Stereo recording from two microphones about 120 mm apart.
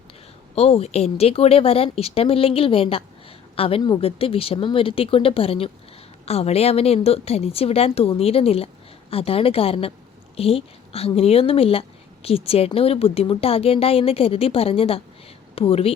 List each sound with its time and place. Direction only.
0.5 s a woman's voice: 60° left (ahead or behind)